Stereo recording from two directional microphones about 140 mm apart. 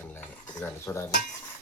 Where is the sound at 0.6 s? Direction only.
20° left (ahead or behind).